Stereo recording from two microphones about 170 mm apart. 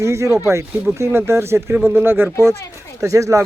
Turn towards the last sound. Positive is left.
turn(degrees=-20)  # may be behind; listen again after turning